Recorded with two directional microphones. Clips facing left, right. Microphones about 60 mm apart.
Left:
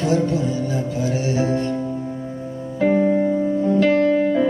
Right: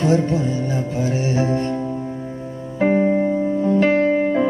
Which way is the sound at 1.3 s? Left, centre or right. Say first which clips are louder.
Even; right.